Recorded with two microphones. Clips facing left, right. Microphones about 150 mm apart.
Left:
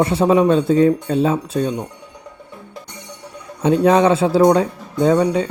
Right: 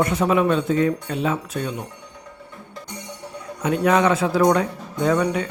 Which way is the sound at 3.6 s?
30° left (ahead or behind).